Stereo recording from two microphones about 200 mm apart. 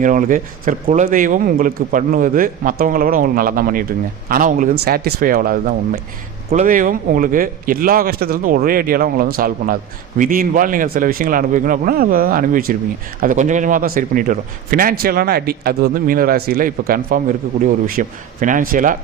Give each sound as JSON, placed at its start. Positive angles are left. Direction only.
{"t": 0.0, "sound": "a man's voice", "side_deg": -40}